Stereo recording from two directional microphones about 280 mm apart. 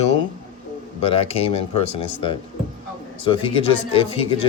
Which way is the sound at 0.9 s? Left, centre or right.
Left.